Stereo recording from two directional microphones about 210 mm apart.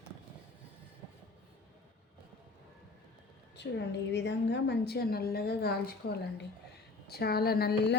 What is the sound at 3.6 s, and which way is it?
A woman's voice, 55° left (ahead or behind).